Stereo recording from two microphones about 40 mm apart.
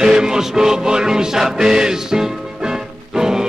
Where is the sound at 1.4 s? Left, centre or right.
Centre.